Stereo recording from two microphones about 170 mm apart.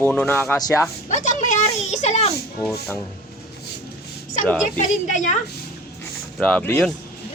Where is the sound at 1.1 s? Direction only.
45° left (ahead or behind).